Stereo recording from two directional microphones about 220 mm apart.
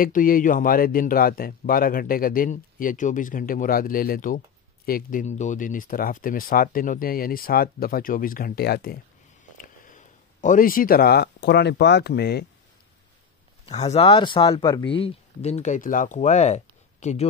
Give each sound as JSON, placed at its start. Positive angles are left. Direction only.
{"t": 0.0, "sound": "speech", "side_deg": 40}
{"t": 9.6, "sound": "speech", "side_deg": 35}
{"t": 13.7, "sound": "speech", "side_deg": 25}